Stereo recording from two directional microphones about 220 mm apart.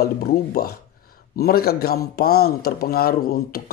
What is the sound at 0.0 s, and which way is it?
A man's voice, 45° left (ahead or behind).